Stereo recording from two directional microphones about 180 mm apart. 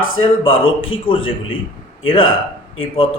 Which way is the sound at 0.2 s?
30° left (ahead or behind).